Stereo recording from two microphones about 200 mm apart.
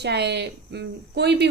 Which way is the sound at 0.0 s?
55° right (ahead or behind).